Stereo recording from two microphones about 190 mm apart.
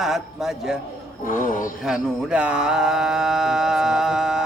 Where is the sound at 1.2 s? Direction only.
45° left (ahead or behind).